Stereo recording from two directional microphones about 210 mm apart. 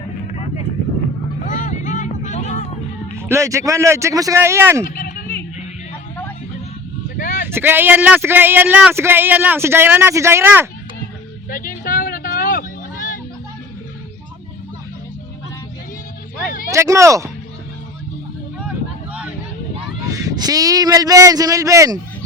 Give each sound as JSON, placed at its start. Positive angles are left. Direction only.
{"t": 1.5, "sound": "vehicle", "side_deg": 40}
{"t": 3.2, "sound": "speech", "side_deg": -15}
{"t": 4.9, "sound": "a sound", "side_deg": 40}
{"t": 7.2, "sound": "vehicle", "side_deg": 35}
{"t": 7.4, "sound": "speech", "side_deg": -10}
{"t": 11.4, "sound": "a sound", "side_deg": 40}
{"t": 16.7, "sound": "speech", "side_deg": -15}
{"t": 20.1, "sound": "speech", "side_deg": -15}